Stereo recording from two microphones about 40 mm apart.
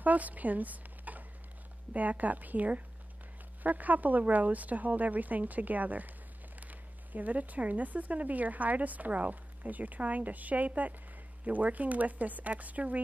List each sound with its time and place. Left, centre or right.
0.0 s a woman's voice: right